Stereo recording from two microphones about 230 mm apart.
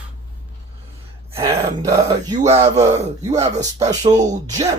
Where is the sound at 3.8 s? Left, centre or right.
Centre.